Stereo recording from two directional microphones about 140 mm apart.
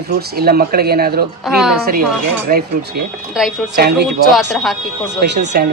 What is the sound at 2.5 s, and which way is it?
Speech, 90° right.